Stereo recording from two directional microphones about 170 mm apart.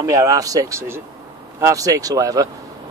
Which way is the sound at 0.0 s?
20° right (ahead or behind).